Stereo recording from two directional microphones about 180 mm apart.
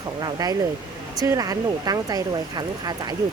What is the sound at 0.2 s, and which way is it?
Speech, 20° right (ahead or behind).